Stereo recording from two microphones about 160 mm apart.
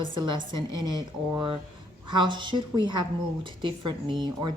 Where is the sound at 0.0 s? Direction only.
30° right (ahead or behind).